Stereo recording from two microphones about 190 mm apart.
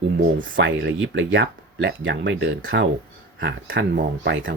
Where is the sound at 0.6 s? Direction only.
80° right.